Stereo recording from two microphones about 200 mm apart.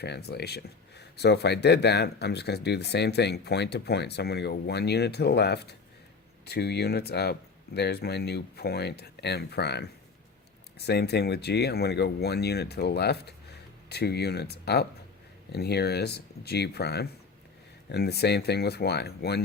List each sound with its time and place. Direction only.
0.0 s speech: 55° left (ahead or behind)